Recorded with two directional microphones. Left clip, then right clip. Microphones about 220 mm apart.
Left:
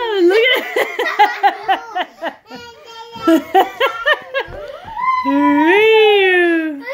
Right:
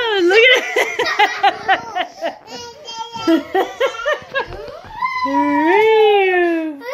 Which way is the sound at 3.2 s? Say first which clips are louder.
Left 4 dB; 25° left (ahead or behind).